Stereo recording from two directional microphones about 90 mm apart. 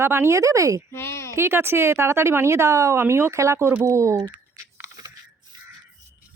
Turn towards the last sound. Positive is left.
turn(degrees=-40)  # may be behind; listen again after turning